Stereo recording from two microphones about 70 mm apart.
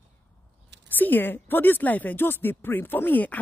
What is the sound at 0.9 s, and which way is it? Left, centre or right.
Speech, left.